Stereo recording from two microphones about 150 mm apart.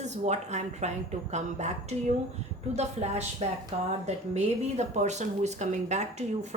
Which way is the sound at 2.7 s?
45° right (ahead or behind).